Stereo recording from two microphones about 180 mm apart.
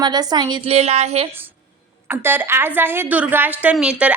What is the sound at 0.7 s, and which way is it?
Speech, 35° right (ahead or behind).